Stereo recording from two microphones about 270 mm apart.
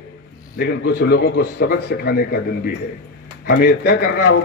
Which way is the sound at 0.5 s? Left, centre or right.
Left.